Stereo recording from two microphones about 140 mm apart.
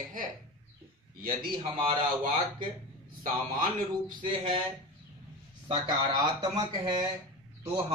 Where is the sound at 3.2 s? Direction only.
80° right.